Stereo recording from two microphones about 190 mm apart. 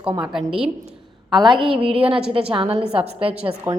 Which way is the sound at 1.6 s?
30° right (ahead or behind).